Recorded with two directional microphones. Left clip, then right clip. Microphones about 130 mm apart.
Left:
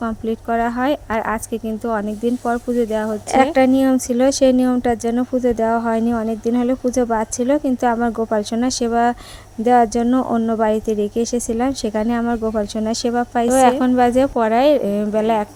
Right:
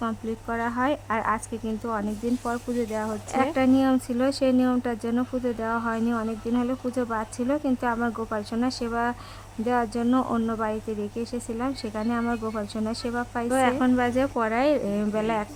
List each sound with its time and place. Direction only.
0.0 s speech: 30° left (ahead or behind)
3.3 s speech: 40° left (ahead or behind)
10.1 s speech: 25° left (ahead or behind)
10.6 s speech: 40° left (ahead or behind); by 15.4 s 25° left (ahead or behind)